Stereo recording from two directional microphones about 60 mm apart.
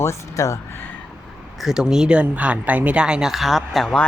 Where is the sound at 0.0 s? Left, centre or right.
Left.